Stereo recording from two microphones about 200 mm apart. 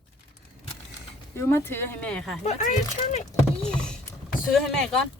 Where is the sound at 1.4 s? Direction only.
10° left (ahead or behind).